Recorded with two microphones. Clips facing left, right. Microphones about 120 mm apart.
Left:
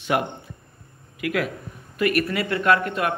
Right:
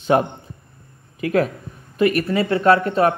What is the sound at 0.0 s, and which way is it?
A man's voice, 35° right (ahead or behind).